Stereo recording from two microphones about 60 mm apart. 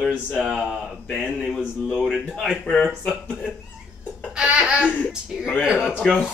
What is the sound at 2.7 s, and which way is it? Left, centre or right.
Speech, centre.